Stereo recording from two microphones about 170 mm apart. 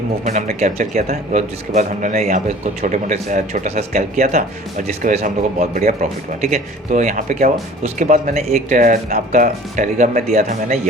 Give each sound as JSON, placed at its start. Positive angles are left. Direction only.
{"t": 0.3, "sound": "speech", "side_deg": -45}